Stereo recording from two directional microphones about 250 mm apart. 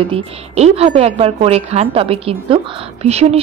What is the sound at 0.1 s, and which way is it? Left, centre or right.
A woman's voice, right.